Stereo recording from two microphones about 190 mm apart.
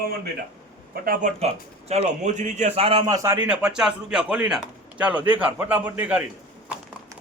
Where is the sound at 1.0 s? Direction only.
50° right (ahead or behind).